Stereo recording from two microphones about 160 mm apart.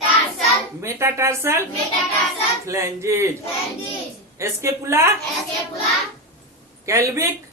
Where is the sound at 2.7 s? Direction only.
20° right (ahead or behind).